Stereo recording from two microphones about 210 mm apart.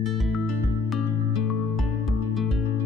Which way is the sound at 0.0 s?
Centre (ahead or behind).